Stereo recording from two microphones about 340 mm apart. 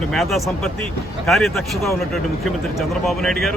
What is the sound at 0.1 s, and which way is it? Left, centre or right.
Speech, centre.